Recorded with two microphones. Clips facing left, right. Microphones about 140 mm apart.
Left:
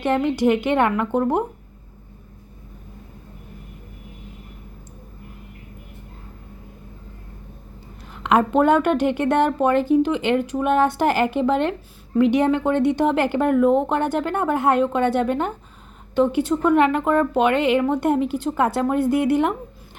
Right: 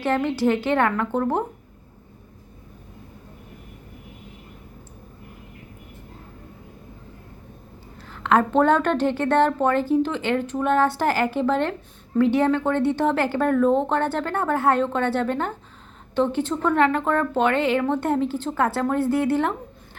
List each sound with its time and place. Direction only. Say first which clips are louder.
0.0 s a woman's voice: left 2 dB; 15° left (ahead or behind)
8.1 s a woman's voice: left 1 dB; 15° left (ahead or behind)